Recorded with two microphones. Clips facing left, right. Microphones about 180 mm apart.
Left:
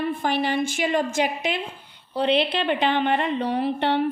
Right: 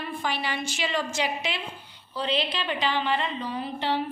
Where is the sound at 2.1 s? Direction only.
60° left (ahead or behind).